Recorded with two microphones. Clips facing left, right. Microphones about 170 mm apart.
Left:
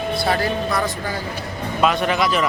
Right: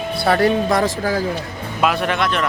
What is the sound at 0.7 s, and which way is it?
Speech, 90° right.